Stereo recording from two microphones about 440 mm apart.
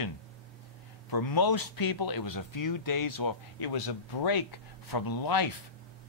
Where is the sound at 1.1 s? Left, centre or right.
Left.